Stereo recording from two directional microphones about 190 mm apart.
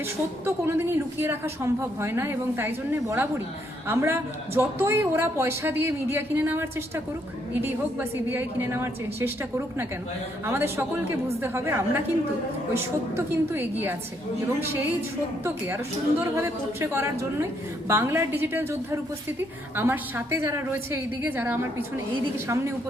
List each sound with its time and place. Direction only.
0.4 s a woman's voice: 10° right (ahead or behind)